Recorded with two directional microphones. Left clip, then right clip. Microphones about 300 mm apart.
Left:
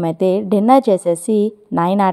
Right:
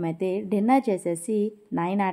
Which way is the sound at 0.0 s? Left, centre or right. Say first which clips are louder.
Left 11 dB; left.